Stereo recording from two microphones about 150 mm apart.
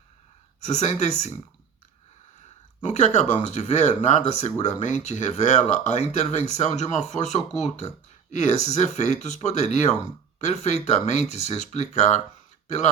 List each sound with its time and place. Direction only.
0.6 s speech: 50° left (ahead or behind)
2.8 s speech: 50° left (ahead or behind)